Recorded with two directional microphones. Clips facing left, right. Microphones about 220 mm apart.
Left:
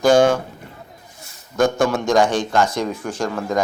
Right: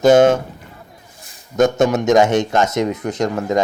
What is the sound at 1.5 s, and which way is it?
A man's voice, 20° right (ahead or behind).